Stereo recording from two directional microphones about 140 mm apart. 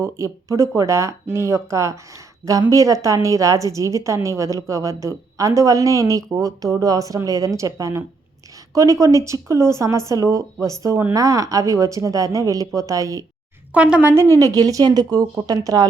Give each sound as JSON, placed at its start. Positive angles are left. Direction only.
{"t": 0.0, "sound": "a woman's voice", "side_deg": -20}
{"t": 13.7, "sound": "speech", "side_deg": -5}
{"t": 14.3, "sound": "a woman's voice", "side_deg": -25}